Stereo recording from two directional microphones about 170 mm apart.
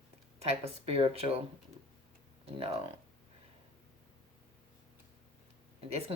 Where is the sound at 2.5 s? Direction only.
35° right (ahead or behind).